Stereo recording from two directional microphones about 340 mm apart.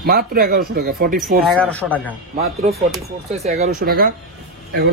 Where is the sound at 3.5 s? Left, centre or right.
Right.